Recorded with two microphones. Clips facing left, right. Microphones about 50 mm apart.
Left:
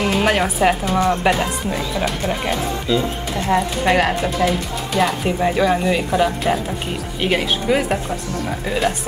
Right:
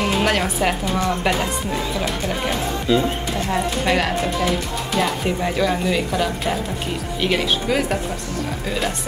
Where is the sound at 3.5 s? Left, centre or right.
Centre.